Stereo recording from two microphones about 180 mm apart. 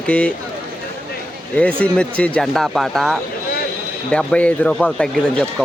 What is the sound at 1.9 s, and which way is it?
A man's voice, 5° left (ahead or behind).